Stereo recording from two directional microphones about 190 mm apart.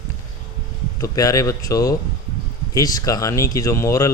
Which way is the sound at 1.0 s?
15° left (ahead or behind).